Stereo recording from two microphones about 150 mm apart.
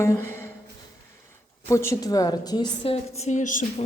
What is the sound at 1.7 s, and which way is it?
A woman's voice, 20° left (ahead or behind).